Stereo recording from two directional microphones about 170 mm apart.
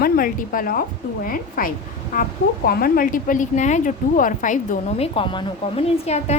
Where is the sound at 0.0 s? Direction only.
55° left (ahead or behind).